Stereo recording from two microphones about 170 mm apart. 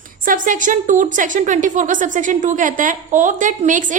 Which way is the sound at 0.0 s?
50° right (ahead or behind).